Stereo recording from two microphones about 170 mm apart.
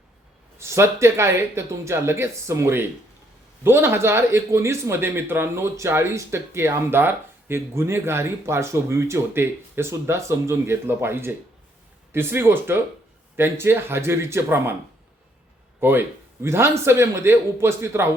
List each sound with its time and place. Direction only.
0.6 s a man's voice: 15° right (ahead or behind)
15.8 s a man's voice: 10° right (ahead or behind)